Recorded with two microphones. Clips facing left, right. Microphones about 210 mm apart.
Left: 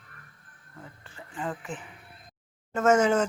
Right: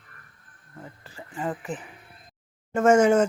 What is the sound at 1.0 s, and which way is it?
Speech, 5° right (ahead or behind).